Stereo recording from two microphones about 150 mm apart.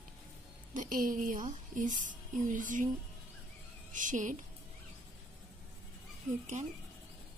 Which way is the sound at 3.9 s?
60° right (ahead or behind).